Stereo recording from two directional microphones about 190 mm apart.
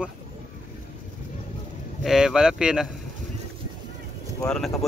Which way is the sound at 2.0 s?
Centre (ahead or behind).